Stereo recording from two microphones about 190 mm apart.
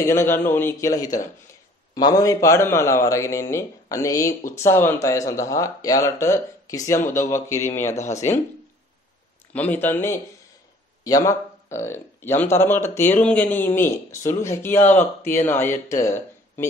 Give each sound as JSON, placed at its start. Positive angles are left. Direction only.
{"t": 0.0, "sound": "speech", "side_deg": 15}
{"t": 9.5, "sound": "speech", "side_deg": 10}